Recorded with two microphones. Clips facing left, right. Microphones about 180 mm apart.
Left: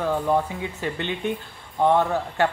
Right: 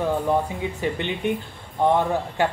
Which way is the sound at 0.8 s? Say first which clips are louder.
Right 2 dB; 15° right (ahead or behind).